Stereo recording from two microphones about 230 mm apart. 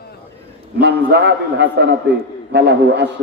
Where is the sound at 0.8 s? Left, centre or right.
Right.